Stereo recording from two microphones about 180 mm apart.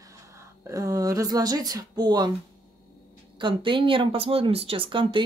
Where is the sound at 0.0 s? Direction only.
15° right (ahead or behind).